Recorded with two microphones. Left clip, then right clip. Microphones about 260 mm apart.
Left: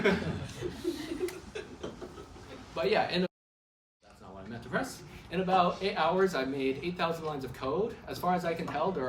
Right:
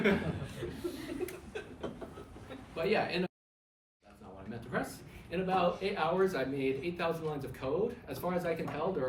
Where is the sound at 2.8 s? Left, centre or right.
Centre.